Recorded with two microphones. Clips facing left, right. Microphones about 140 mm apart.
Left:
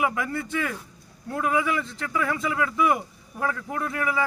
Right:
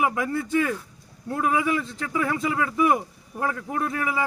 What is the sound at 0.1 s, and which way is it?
Speech, 25° right (ahead or behind).